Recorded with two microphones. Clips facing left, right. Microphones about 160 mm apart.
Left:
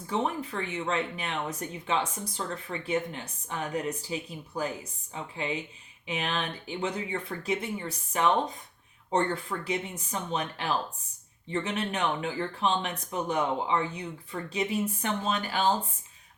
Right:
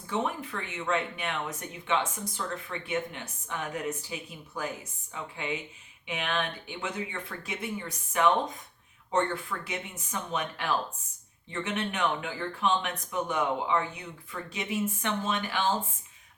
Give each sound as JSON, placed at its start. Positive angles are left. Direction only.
{"t": 0.1, "sound": "speech", "side_deg": 35}